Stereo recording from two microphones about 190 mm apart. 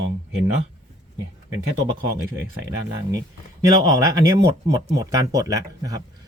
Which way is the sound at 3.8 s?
20° right (ahead or behind).